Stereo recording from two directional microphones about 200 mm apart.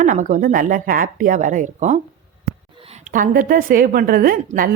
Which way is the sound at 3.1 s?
45° right (ahead or behind).